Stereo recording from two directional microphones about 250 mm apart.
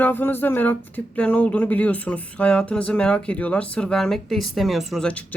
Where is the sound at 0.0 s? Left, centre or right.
Centre.